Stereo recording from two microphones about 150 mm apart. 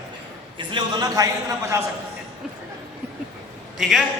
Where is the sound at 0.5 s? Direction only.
30° right (ahead or behind).